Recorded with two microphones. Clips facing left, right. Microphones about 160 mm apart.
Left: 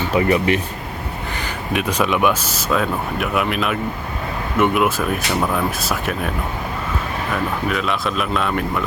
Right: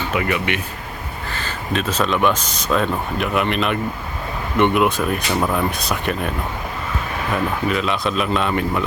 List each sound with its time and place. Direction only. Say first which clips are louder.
0.1 s speech: left 6 dB; 35° left (ahead or behind)
1.3 s speech: even; 15° left (ahead or behind)
7.7 s speech: right 1 dB; centre (ahead or behind)